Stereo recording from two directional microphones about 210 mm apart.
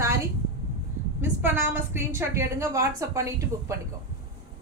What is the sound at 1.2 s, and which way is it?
A woman's voice, 10° right (ahead or behind).